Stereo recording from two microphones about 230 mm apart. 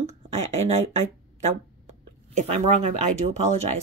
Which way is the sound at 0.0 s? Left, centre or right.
Right.